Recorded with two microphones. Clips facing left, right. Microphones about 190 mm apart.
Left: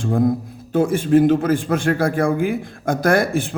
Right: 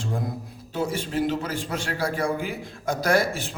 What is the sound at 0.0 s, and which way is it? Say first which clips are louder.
A man's voice: left 12 dB; 50° left (ahead or behind).